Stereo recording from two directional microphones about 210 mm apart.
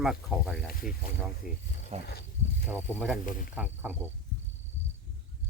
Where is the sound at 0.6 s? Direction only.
45° left (ahead or behind).